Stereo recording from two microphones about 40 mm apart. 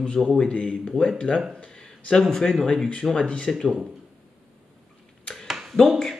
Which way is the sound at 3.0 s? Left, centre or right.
Centre.